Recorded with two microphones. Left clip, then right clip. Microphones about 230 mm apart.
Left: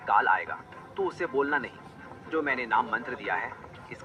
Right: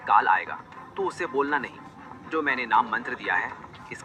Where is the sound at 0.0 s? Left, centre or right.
Centre.